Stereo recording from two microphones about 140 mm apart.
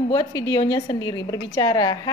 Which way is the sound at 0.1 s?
25° left (ahead or behind).